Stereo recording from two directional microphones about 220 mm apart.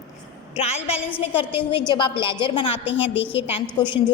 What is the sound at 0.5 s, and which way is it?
A woman's voice, 30° left (ahead or behind).